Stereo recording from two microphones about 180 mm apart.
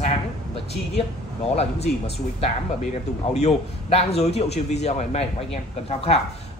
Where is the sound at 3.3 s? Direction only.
35° left (ahead or behind).